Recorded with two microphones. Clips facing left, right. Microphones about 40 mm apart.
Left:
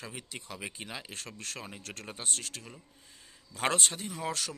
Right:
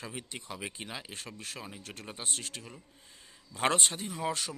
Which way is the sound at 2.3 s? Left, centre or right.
Right.